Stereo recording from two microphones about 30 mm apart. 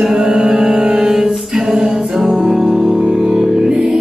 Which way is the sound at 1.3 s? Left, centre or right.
Centre.